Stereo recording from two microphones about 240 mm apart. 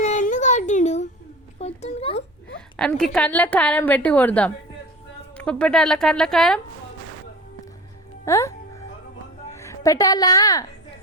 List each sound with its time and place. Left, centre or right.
0.0 s a sound: left
2.7 s a woman's voice: centre
8.2 s a woman's voice: centre